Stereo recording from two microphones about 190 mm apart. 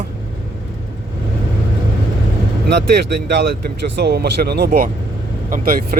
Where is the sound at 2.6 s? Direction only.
60° right (ahead or behind).